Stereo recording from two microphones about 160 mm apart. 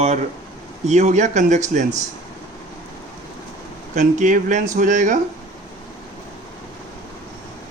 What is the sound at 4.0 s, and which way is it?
Speech, 50° right (ahead or behind).